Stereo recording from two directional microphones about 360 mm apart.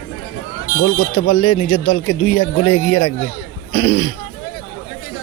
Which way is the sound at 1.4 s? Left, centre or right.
Left.